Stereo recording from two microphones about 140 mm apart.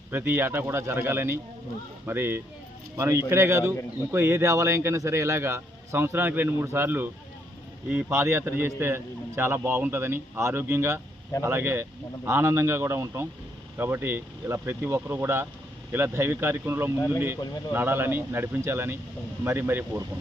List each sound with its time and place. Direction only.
0.1 s a man's voice: 15° right (ahead or behind)